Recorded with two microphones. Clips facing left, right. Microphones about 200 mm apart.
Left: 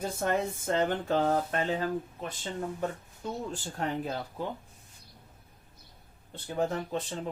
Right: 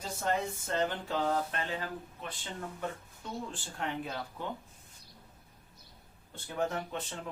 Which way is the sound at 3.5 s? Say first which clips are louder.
Left 5 dB; 40° left (ahead or behind).